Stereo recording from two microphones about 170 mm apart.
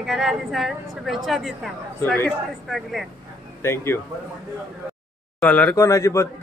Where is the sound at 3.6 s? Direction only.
15° left (ahead or behind).